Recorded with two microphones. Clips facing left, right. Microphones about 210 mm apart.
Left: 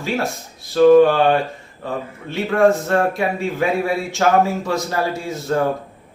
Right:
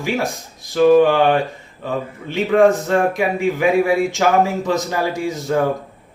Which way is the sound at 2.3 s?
15° right (ahead or behind).